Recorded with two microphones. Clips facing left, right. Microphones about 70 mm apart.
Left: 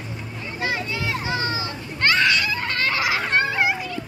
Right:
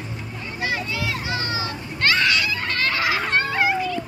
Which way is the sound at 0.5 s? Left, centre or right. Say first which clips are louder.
Even; left.